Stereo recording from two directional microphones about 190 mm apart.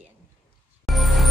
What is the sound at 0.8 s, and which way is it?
Music, centre (ahead or behind).